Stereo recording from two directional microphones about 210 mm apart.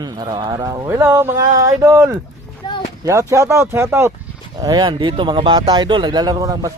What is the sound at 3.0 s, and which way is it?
Speech, 15° right (ahead or behind).